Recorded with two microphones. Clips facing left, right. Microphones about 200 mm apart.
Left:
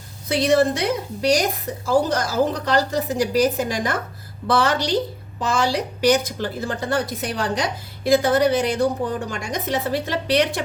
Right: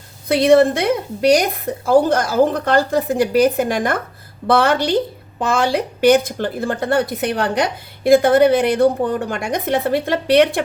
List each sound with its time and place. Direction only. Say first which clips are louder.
0.3 s a woman's voice: right 6 dB; 60° right (ahead or behind)